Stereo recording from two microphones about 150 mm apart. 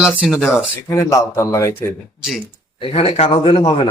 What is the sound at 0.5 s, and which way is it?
Speech, 20° left (ahead or behind).